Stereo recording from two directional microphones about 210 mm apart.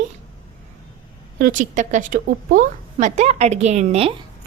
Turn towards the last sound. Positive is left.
turn(degrees=-25)  # may be behind; listen again after turning